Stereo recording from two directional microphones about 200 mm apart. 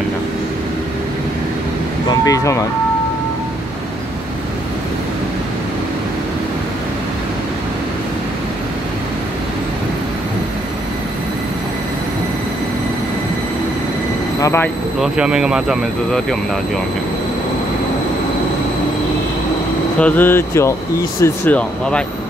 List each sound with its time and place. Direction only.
2.0 s speech: 15° left (ahead or behind)
14.4 s speech: 10° left (ahead or behind)
15.0 s speech: 5° right (ahead or behind)
20.0 s speech: 10° left (ahead or behind)